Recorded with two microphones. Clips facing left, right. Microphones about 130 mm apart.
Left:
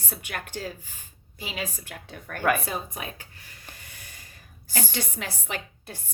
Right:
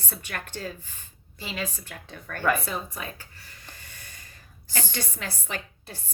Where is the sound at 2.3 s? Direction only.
15° left (ahead or behind).